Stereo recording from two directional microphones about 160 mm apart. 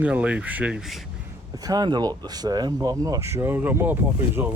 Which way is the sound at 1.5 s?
25° right (ahead or behind).